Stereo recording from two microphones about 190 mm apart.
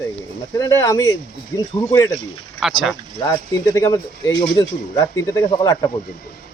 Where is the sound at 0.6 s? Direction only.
15° left (ahead or behind).